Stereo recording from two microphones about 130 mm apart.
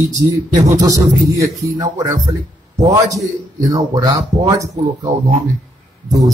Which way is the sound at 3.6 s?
30° right (ahead or behind).